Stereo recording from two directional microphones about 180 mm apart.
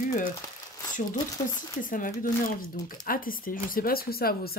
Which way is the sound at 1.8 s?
50° left (ahead or behind).